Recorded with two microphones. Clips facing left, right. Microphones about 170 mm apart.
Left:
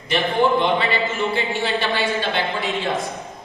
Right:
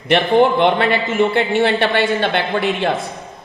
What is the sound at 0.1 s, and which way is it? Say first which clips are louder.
A woman's voice: right 5 dB; 60° right (ahead or behind).